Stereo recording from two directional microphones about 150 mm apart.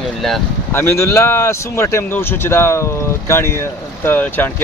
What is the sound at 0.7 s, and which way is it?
Speech, 15° left (ahead or behind).